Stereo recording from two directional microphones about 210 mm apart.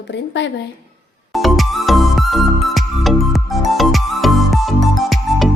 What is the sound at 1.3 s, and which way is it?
Music, centre (ahead or behind).